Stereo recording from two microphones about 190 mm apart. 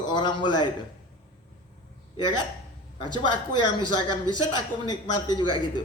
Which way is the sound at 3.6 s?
25° left (ahead or behind).